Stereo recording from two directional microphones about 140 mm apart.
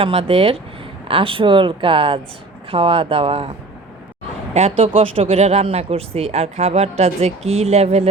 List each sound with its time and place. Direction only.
0.0 s speech: 40° right (ahead or behind)
4.5 s speech: 45° right (ahead or behind)